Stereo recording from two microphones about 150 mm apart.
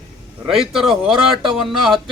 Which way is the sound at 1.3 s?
35° right (ahead or behind).